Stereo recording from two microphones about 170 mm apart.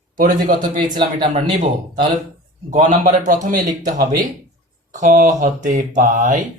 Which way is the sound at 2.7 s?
45° right (ahead or behind).